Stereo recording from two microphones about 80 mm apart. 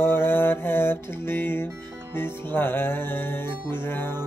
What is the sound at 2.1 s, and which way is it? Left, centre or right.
Music, left.